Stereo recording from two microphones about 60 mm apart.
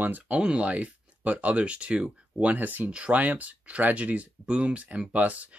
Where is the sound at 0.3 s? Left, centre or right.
Centre.